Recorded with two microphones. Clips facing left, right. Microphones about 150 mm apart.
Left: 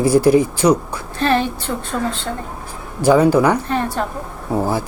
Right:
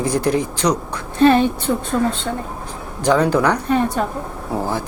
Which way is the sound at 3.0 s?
10° left (ahead or behind).